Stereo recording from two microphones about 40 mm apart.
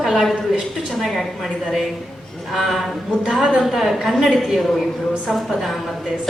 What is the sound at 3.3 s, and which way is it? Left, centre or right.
Speech, centre.